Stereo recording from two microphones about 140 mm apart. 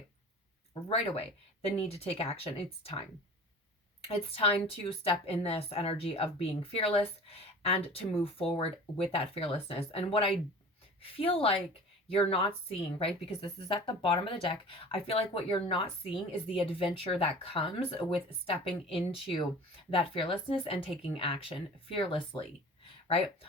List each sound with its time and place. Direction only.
0.7 s a woman's voice: 45° left (ahead or behind)
4.0 s a woman's voice: 45° left (ahead or behind)